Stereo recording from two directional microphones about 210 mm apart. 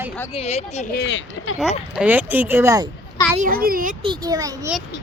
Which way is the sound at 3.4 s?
45° right (ahead or behind).